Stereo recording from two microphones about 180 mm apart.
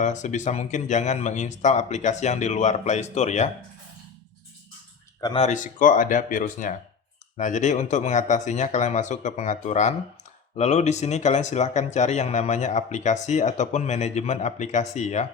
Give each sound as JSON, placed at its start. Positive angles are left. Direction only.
{"t": 0.0, "sound": "speech", "side_deg": 40}
{"t": 5.2, "sound": "speech", "side_deg": 25}
{"t": 5.5, "sound": "speech", "side_deg": 45}